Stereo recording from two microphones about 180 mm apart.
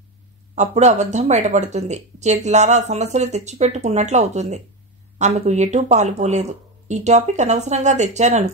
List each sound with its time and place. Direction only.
0.6 s speech: 40° right (ahead or behind)